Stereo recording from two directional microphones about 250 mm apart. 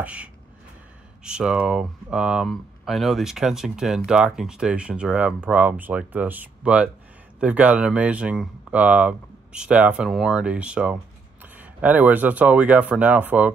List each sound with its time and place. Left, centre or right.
0.0 s speech: centre